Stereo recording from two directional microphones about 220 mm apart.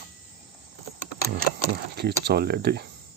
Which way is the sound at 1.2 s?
45° right (ahead or behind).